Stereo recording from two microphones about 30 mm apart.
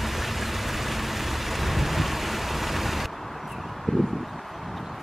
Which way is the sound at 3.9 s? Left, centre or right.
Left.